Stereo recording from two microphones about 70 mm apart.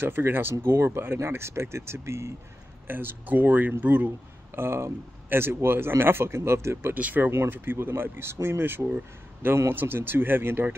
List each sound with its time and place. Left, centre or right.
0.0 s speech: right
2.9 s speech: right
4.6 s speech: right
6.9 s speech: right